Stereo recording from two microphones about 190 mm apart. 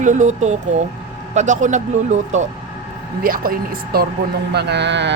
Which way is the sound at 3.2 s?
50° right (ahead or behind).